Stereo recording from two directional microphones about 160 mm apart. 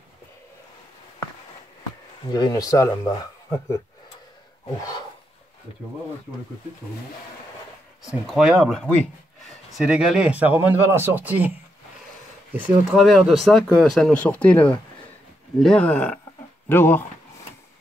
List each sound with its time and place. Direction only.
2.3 s speech: 25° left (ahead or behind)
8.1 s speech: 5° right (ahead or behind)
12.5 s speech: 10° right (ahead or behind)
13.0 s speech: centre (ahead or behind)